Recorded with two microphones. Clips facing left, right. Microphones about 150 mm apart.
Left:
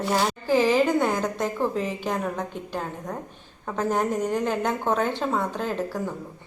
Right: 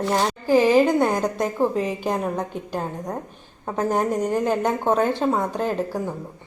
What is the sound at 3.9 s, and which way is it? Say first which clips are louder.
A woman's voice: right 2 dB; 15° right (ahead or behind).